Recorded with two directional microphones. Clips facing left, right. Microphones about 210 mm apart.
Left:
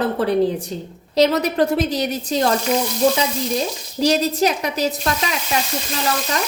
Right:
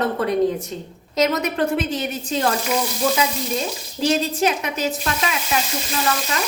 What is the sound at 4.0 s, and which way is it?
A woman's voice, 40° left (ahead or behind).